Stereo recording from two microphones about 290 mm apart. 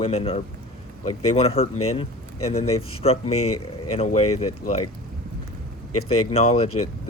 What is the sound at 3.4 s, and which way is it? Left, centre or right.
Speech, left.